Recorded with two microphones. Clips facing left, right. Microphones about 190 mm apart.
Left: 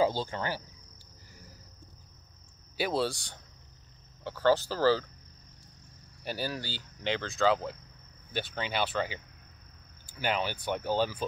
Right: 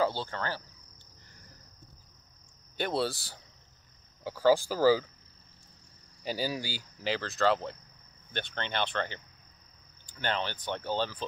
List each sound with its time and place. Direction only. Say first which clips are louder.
0.0 s speech: left 2 dB; 15° left (ahead or behind)
2.8 s speech: left 1 dB; centre (ahead or behind)
6.2 s speech: right 2 dB; 15° right (ahead or behind); by 11.2 s 10° left (ahead or behind)